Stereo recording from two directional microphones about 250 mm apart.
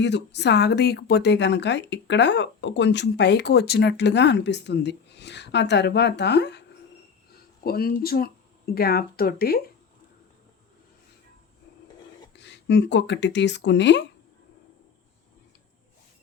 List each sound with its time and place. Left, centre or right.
0.0 s speech: left
12.4 s speech: left